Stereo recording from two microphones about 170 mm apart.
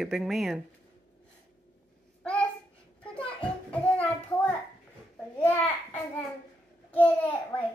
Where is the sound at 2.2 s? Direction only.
5° left (ahead or behind).